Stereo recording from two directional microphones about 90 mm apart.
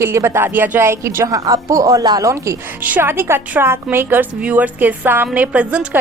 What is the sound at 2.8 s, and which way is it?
A woman's voice, 20° right (ahead or behind).